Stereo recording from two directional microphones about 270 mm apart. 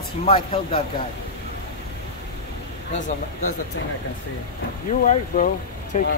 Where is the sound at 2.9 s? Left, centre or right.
Left.